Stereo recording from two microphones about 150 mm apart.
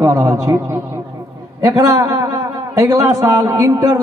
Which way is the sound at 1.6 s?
25° right (ahead or behind).